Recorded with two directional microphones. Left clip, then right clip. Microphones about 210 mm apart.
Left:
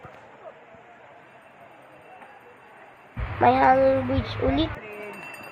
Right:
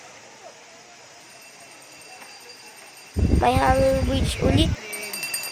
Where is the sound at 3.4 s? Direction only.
25° right (ahead or behind).